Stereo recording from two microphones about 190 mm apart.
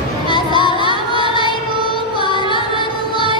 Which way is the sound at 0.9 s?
25° right (ahead or behind).